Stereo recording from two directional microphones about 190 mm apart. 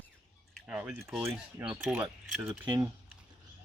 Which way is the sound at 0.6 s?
5° right (ahead or behind).